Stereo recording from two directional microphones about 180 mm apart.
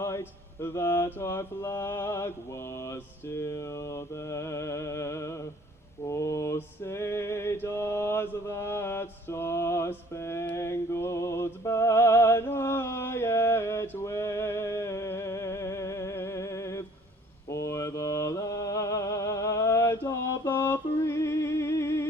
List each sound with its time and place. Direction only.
0.0 s mantra: 15° left (ahead or behind)